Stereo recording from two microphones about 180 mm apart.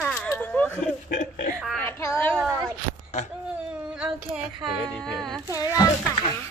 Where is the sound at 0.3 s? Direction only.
10° left (ahead or behind).